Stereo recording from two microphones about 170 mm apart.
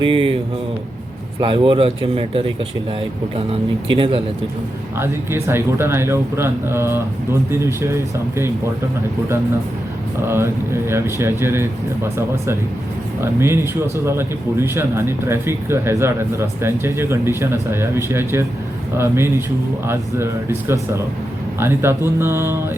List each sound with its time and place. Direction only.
0.0 s speech: 30° right (ahead or behind)
1.4 s speech: 30° right (ahead or behind)
4.9 s speech: 15° right (ahead or behind)
10.2 s speech: 15° right (ahead or behind)